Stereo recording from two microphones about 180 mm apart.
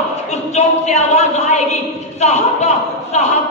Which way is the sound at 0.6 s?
40° left (ahead or behind).